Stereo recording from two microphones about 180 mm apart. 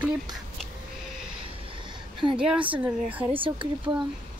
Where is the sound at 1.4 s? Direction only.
30° right (ahead or behind).